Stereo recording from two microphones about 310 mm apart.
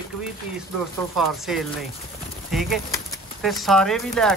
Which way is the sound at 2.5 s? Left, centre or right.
Centre.